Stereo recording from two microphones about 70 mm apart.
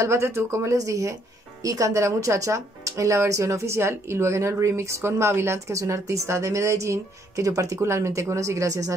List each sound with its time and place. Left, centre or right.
0.0 s speech: right